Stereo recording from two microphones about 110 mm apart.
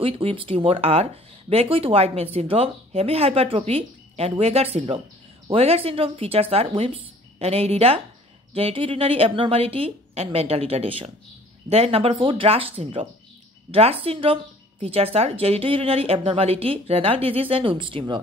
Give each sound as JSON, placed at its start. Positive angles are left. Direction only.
{"t": 0.0, "sound": "a woman's voice", "side_deg": -55}